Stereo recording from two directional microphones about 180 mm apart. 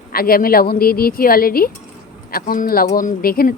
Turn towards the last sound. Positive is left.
turn(degrees=55)  # may be behind; listen again after turning